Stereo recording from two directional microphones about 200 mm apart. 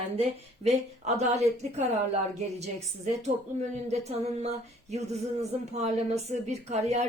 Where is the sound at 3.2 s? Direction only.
35° right (ahead or behind).